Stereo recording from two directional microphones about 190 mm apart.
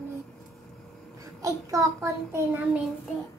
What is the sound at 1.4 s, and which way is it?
A child's voice, 15° right (ahead or behind).